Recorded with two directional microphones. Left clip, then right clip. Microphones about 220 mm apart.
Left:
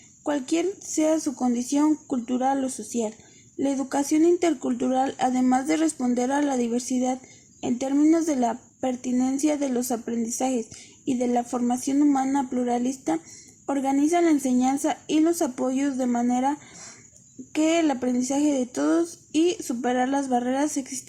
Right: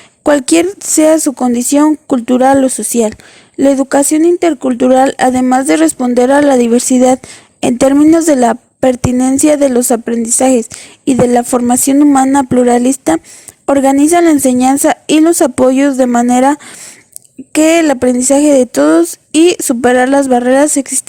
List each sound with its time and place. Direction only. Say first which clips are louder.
0.3 s a woman's voice: right 16 dB; 45° right (ahead or behind)